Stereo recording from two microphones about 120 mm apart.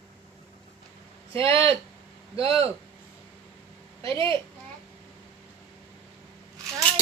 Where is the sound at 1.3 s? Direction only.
50° right (ahead or behind).